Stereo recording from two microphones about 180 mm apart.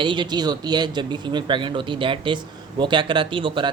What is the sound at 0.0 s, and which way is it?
Speech, 25° right (ahead or behind).